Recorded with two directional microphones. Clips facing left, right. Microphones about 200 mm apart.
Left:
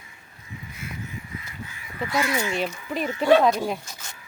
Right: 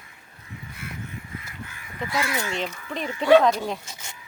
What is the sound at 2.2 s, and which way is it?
Speech, 10° left (ahead or behind).